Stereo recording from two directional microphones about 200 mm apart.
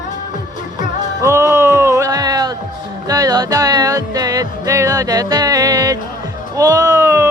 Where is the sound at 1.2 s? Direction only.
15° right (ahead or behind).